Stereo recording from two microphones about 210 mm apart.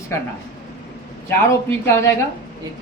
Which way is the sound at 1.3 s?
10° left (ahead or behind).